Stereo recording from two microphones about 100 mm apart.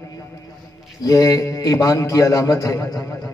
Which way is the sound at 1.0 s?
35° left (ahead or behind).